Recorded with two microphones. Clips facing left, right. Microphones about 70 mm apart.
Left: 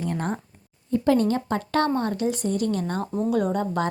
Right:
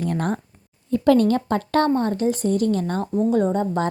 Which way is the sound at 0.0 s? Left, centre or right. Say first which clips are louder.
Right 4 dB; right.